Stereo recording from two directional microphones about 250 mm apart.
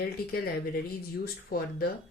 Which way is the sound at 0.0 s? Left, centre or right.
Left.